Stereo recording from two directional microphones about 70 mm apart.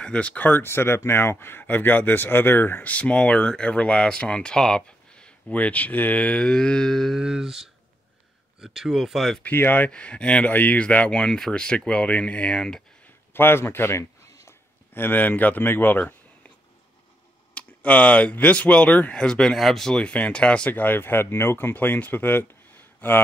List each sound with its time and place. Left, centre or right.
0.0 s speech: centre
2.9 s speech: centre
7.2 s speech: centre
9.4 s speech: left
9.8 s speech: centre
13.3 s speech: left
15.0 s speech: left
17.6 s speech: centre